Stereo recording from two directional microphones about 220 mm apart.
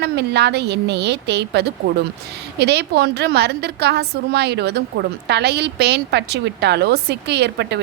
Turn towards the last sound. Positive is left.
turn(degrees=-50)  # may be behind; listen again after turning